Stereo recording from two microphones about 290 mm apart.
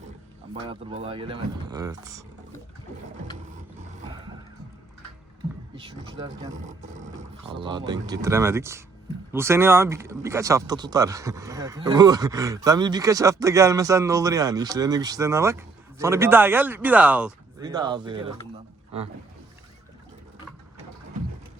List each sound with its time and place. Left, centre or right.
0.5 s speech: centre
5.7 s speech: centre
6.5 s speech: right